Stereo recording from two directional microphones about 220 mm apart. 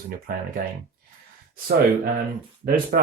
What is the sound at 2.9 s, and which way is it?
Speech, 45° right (ahead or behind).